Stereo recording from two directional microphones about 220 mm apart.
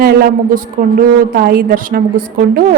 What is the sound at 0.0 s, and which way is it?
A woman's voice, 40° right (ahead or behind).